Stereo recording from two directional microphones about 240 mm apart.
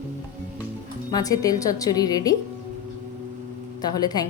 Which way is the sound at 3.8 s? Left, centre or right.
Centre.